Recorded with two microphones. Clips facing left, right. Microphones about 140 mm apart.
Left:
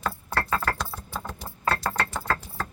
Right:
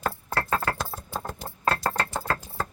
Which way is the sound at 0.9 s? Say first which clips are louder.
Right 1 dB; 45° right (ahead or behind).